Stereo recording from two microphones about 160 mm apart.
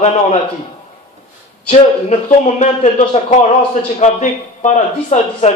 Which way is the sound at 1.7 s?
45° left (ahead or behind).